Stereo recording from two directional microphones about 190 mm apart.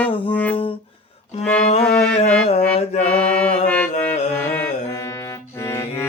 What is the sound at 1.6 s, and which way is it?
Music, 35° left (ahead or behind).